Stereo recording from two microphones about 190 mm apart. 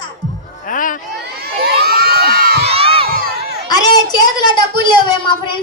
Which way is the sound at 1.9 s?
55° right (ahead or behind).